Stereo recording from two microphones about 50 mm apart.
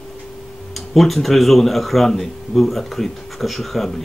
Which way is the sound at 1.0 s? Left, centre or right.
Centre.